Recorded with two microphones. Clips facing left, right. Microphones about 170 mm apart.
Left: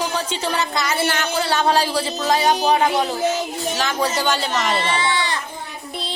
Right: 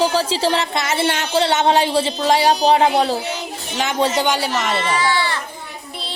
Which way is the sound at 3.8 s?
20° right (ahead or behind).